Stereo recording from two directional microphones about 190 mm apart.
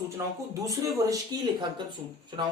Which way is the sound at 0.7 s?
20° right (ahead or behind).